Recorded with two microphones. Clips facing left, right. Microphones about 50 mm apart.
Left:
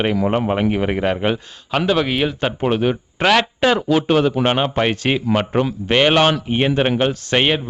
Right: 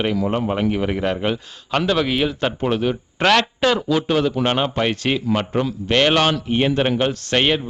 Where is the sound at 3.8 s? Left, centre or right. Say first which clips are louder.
Left 3 dB; left.